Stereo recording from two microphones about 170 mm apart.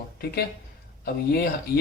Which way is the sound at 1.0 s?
65° left (ahead or behind).